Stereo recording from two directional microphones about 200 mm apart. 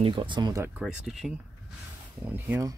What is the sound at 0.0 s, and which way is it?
Speech, 25° right (ahead or behind).